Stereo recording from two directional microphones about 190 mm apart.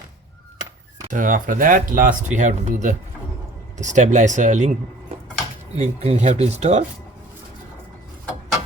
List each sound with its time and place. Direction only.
1.1 s speech: 45° right (ahead or behind)
5.7 s speech: 35° right (ahead or behind)